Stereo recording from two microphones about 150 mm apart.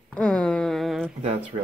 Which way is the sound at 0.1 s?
5° left (ahead or behind).